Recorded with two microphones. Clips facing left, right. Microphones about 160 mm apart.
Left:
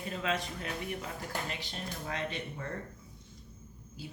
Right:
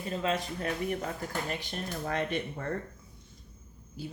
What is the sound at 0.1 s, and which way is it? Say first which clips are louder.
Speech: right 4 dB; 35° right (ahead or behind).